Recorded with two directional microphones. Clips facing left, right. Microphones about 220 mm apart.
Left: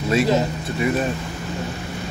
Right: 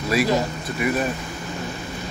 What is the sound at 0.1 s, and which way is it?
Speech, 25° left (ahead or behind).